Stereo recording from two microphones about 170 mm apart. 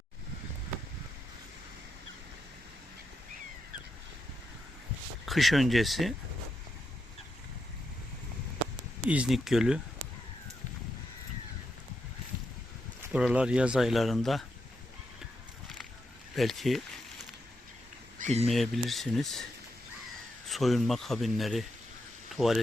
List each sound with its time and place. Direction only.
5.2 s speech: centre (ahead or behind)
9.0 s speech: 5° right (ahead or behind)
13.1 s speech: 5° right (ahead or behind)
16.3 s a sound: centre (ahead or behind)
18.2 s a sound: 40° right (ahead or behind)
18.4 s speech: centre (ahead or behind)
20.5 s speech: centre (ahead or behind)